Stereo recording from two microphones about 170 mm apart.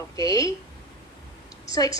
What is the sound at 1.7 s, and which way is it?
Speech, 20° left (ahead or behind).